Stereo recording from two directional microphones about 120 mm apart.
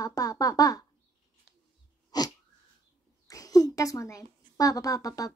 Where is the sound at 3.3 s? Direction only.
30° left (ahead or behind).